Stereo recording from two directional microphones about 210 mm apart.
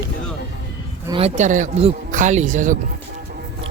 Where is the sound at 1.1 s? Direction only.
30° right (ahead or behind).